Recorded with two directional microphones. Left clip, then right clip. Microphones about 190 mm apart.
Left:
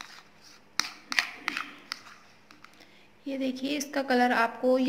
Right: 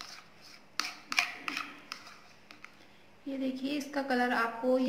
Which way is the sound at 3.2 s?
50° left (ahead or behind).